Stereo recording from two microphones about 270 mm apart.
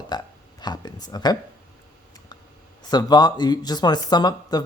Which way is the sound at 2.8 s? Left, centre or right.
Centre.